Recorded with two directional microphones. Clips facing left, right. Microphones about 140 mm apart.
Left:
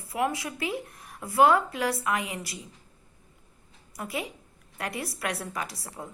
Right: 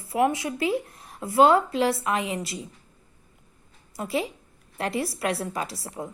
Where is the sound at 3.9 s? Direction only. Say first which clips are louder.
Right 6 dB; 30° right (ahead or behind).